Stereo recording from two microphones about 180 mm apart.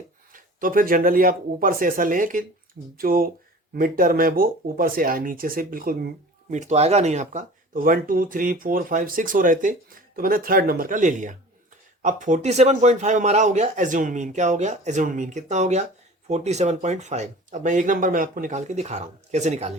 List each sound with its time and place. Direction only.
0.3 s speech: 50° right (ahead or behind)
6.5 s a man's voice: 40° right (ahead or behind)